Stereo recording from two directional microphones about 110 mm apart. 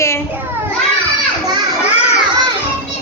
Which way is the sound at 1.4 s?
35° right (ahead or behind).